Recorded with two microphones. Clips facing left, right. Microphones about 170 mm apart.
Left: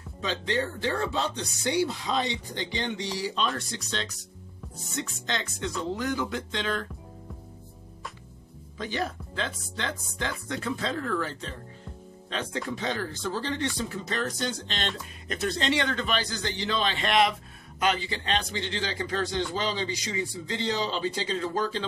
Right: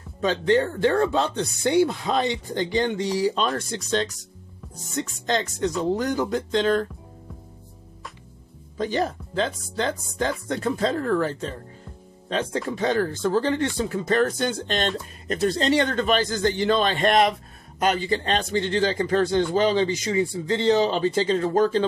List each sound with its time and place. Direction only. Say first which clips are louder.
0.2 s a man's voice: right 9 dB; 50° right (ahead or behind)
8.7 s a man's voice: right 7 dB; 40° right (ahead or behind)
12.8 s a man's voice: right 12 dB; 50° right (ahead or behind)
15.2 s a man's voice: right 6 dB; 40° right (ahead or behind)